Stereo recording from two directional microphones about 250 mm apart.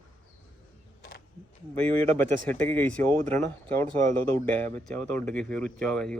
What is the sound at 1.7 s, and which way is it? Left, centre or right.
Speech, centre.